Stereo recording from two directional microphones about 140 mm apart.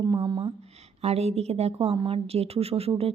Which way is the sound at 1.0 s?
50° right (ahead or behind).